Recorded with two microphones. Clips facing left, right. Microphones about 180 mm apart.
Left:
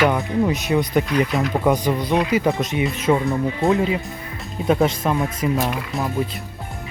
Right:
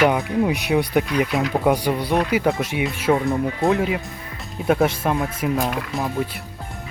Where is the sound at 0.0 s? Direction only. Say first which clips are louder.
Even; 10° right (ahead or behind).